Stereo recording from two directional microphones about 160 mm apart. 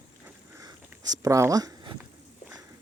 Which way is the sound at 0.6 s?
25° right (ahead or behind).